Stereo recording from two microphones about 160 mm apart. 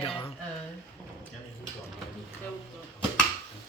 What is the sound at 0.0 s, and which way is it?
Speech, 35° left (ahead or behind).